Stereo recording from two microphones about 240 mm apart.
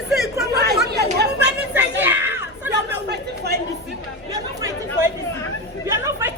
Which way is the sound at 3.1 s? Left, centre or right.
Right.